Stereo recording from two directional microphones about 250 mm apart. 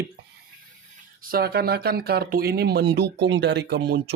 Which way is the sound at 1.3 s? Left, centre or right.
Right.